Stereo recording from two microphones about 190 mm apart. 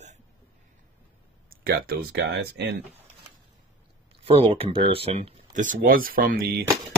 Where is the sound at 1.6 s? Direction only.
55° right (ahead or behind).